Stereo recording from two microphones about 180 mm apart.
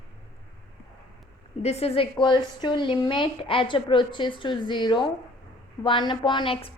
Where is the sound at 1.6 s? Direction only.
35° left (ahead or behind).